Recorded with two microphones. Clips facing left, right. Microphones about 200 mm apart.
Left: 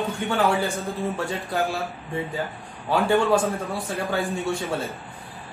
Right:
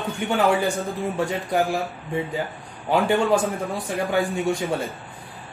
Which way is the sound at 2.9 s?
15° right (ahead or behind).